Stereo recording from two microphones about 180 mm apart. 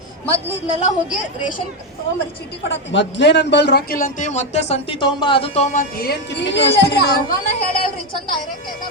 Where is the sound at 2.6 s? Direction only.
85° left.